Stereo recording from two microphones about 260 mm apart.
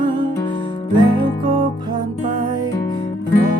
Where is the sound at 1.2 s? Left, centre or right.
Centre.